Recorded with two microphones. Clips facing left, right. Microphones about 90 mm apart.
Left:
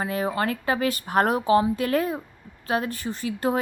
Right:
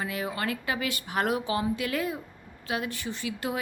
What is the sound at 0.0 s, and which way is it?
A woman's voice, 35° left (ahead or behind).